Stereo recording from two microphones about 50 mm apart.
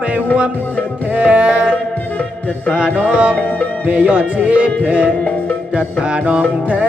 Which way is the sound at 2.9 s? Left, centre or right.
Right.